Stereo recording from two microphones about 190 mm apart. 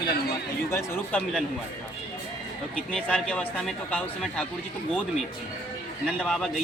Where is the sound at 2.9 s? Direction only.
5° left (ahead or behind).